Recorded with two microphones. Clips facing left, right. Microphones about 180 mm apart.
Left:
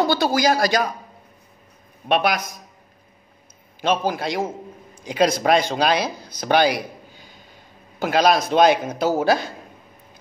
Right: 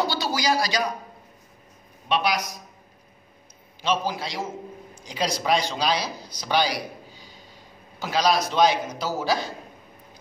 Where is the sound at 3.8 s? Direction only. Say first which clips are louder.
Left 4 dB; 55° left (ahead or behind).